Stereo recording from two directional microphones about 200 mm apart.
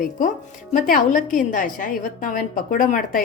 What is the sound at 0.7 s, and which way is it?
A woman's voice, 40° left (ahead or behind).